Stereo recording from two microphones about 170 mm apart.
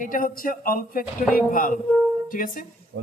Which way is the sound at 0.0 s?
55° left (ahead or behind).